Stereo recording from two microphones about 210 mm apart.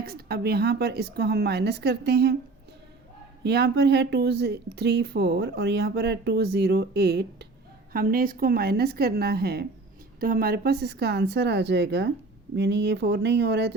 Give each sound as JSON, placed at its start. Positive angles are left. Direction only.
{"t": 0.0, "sound": "speech", "side_deg": -50}
{"t": 3.4, "sound": "speech", "side_deg": -50}